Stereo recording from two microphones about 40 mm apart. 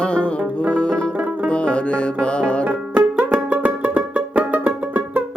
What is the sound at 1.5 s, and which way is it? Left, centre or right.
Music, left.